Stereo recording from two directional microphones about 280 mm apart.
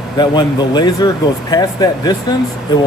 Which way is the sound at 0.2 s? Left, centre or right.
Centre.